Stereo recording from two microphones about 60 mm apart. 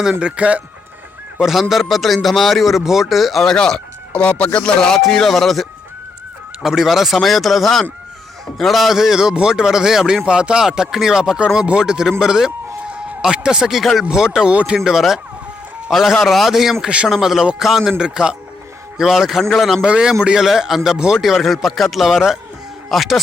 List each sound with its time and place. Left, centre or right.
0.0 s speech: centre
1.4 s a man's voice: centre
3.5 s a man's voice: centre
14.8 s a man's voice: centre